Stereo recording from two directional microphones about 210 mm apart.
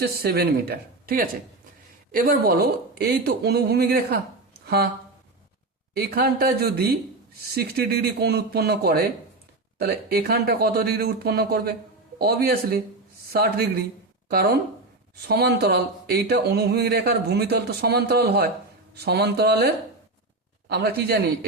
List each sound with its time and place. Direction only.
0.0 s speech: 50° right (ahead or behind)
5.9 s speech: 50° right (ahead or behind)